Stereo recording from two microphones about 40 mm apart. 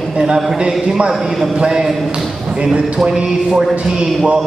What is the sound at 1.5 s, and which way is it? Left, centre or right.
Speech, centre.